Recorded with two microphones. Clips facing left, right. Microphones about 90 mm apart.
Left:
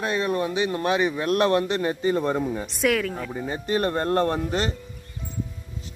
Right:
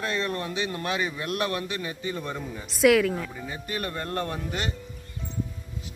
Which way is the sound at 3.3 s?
45° left (ahead or behind).